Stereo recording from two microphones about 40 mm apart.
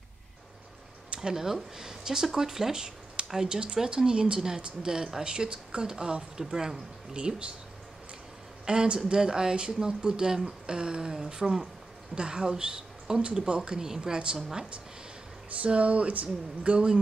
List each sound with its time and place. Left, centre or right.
1.1 s speech: centre
7.2 s speech: right
8.6 s speech: right
15.6 s speech: right
16.7 s speech: right